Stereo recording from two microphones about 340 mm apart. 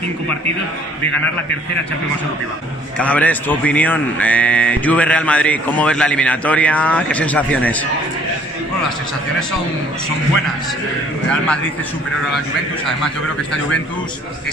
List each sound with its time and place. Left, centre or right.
3.0 s a man's voice: centre
12.8 s a man's voice: centre